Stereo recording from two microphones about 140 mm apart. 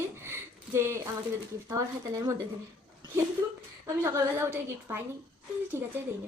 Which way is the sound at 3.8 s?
20° right (ahead or behind).